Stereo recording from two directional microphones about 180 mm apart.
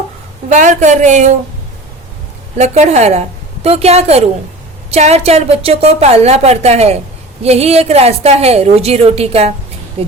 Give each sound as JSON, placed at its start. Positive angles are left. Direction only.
{"t": 0.4, "sound": "a woman's voice", "side_deg": -40}
{"t": 2.6, "sound": "a woman's voice", "side_deg": -40}